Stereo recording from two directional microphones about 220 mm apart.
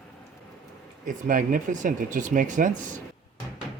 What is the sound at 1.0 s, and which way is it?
Speech, 40° right (ahead or behind).